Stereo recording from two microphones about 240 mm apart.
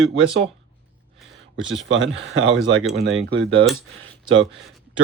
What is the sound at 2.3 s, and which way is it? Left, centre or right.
Speech, right.